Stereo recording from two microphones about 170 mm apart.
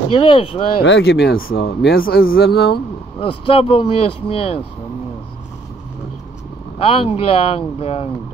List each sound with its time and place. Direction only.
0.1 s speech: 30° left (ahead or behind)
0.8 s speech: 85° left
3.2 s speech: 30° left (ahead or behind)
6.8 s speech: 30° left (ahead or behind)